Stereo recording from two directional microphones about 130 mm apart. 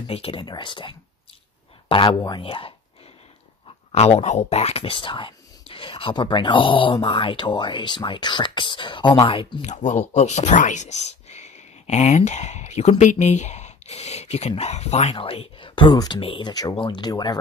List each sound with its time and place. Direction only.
0.0 s speech: 45° left (ahead or behind)
2.1 s speech: 30° left (ahead or behind)
2.4 s speech: 45° left (ahead or behind)
3.9 s speech: 55° left (ahead or behind)
9.7 s speech: 70° left (ahead or behind); by 17.4 s 35° left (ahead or behind)